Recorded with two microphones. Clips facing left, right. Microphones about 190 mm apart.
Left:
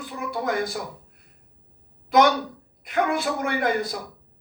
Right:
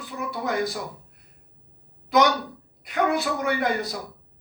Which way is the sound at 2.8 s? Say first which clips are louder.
Even; 50° left (ahead or behind).